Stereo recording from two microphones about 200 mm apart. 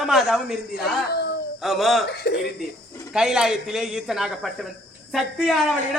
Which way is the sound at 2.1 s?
55° left (ahead or behind).